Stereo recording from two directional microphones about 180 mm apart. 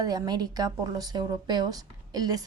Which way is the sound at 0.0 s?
20° right (ahead or behind).